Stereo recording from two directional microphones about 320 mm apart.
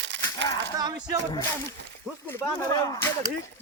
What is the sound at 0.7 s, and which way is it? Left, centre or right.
Speech, centre.